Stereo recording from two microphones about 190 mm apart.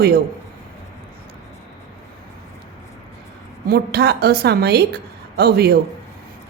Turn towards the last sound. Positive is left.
turn(degrees=-55)  # may be behind; listen again after turning